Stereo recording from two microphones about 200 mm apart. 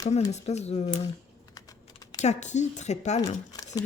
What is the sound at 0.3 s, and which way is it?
Speech, 35° left (ahead or behind).